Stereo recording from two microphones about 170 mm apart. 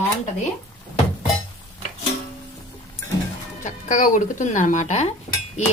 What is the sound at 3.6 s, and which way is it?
Cutlery, 50° left (ahead or behind).